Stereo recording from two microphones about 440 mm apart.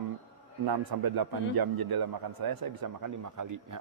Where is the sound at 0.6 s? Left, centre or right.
Right.